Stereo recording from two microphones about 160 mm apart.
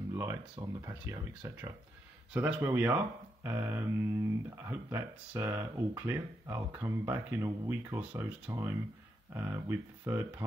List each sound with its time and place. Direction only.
0.1 s speech: 15° right (ahead or behind)